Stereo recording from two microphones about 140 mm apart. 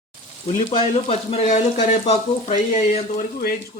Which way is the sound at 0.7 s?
50° left (ahead or behind).